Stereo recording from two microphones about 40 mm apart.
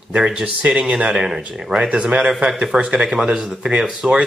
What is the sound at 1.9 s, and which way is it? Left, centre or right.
Speech, right.